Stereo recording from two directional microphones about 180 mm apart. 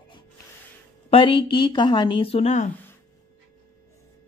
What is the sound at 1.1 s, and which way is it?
A woman's voice, 30° left (ahead or behind).